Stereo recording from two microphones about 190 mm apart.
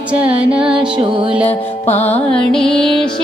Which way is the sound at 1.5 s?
35° left (ahead or behind).